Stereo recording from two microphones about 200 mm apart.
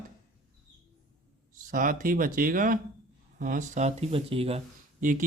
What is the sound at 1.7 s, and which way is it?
Speech, 45° right (ahead or behind).